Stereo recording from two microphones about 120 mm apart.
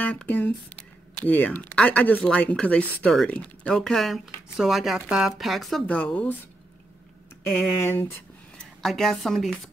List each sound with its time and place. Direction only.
0.0 s speech: 10° left (ahead or behind)
7.8 s speech: 20° left (ahead or behind)
8.8 s speech: centre (ahead or behind)